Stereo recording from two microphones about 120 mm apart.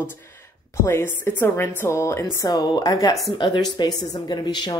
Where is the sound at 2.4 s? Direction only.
35° left (ahead or behind).